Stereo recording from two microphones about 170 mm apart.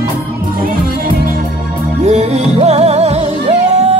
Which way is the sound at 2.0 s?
40° right (ahead or behind).